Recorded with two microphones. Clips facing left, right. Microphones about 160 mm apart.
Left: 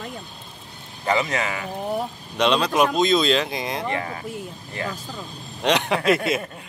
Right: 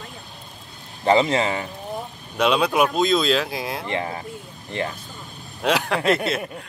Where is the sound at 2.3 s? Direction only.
5° right (ahead or behind).